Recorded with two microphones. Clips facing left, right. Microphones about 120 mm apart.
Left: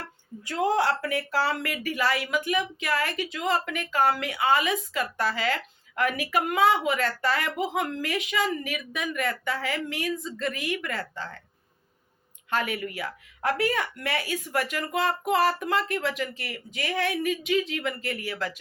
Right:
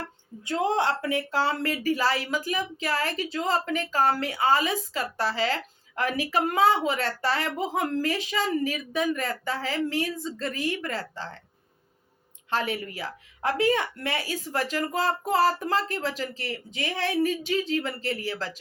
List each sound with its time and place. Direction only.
0.4 s speech: 25° right (ahead or behind)
12.5 s speech: 30° right (ahead or behind)